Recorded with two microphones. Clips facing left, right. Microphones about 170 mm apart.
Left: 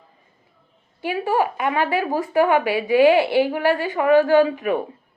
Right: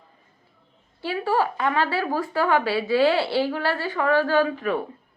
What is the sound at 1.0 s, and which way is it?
Speech, 15° left (ahead or behind).